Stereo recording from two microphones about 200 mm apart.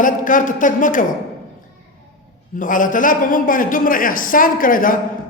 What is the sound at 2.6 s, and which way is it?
A man's voice, 40° left (ahead or behind).